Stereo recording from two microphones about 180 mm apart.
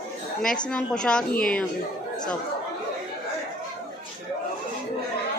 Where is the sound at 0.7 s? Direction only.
5° left (ahead or behind).